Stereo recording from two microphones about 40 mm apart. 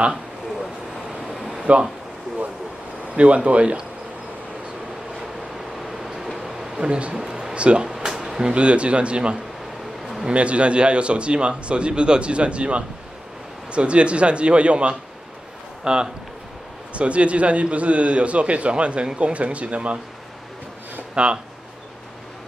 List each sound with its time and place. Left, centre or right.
1.3 s a sound: centre
3.2 s a man's voice: right
5.9 s train: centre
6.8 s a man's voice: right
7.2 s a sound: centre
7.5 s speech: right
7.8 s a man's voice: centre
16.9 s a man's voice: right
21.1 s speech: right